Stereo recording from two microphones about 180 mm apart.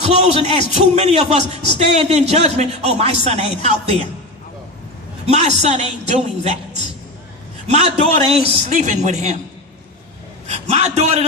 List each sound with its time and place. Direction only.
0.4 s a man's voice: 35° right (ahead or behind)
5.2 s a man's voice: 35° right (ahead or behind)
7.7 s a man's voice: 35° right (ahead or behind)
10.5 s a man's voice: 35° right (ahead or behind)